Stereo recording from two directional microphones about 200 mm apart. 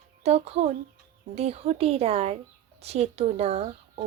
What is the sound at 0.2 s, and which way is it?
Speech, 35° right (ahead or behind).